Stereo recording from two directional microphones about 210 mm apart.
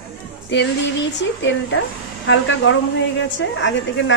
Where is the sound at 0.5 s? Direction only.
55° left (ahead or behind).